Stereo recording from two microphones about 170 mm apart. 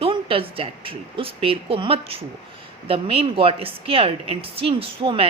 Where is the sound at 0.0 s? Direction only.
30° right (ahead or behind).